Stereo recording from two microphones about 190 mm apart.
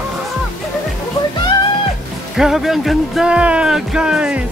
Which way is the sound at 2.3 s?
Centre (ahead or behind).